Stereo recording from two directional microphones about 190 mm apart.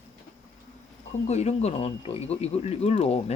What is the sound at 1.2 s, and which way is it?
Speech, 35° left (ahead or behind).